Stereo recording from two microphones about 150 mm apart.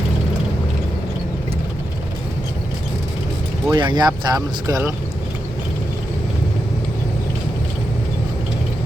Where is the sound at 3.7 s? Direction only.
30° right (ahead or behind).